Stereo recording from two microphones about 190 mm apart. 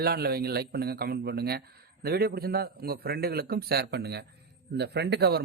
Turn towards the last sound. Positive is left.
turn(degrees=-60)  # may be behind; listen again after turning